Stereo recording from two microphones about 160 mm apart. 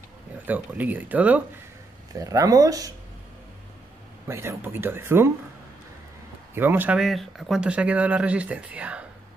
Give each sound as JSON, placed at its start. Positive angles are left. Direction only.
{"t": 0.5, "sound": "speech", "side_deg": -10}
{"t": 2.1, "sound": "speech", "side_deg": -20}
{"t": 4.3, "sound": "speech", "side_deg": -15}
{"t": 6.5, "sound": "speech", "side_deg": -15}